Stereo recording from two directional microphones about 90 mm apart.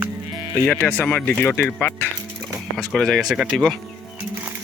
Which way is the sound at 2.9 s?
5° left (ahead or behind).